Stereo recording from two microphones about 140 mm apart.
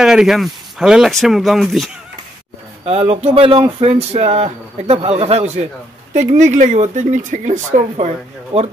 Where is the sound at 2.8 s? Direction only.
45° right (ahead or behind).